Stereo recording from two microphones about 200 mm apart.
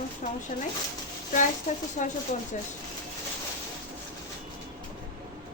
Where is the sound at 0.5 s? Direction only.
40° left (ahead or behind).